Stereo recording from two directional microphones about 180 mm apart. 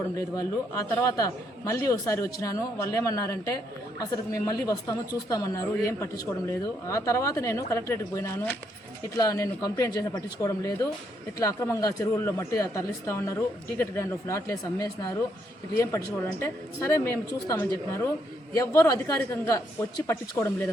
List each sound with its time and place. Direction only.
0.3 s speech: 20° left (ahead or behind)